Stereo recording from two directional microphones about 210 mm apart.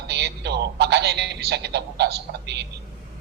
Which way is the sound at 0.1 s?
55° right (ahead or behind).